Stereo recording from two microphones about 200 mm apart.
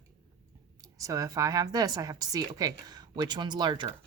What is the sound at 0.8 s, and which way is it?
A woman's voice, 15° right (ahead or behind).